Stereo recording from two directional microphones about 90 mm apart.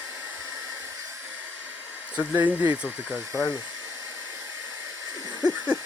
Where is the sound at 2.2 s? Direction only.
20° right (ahead or behind).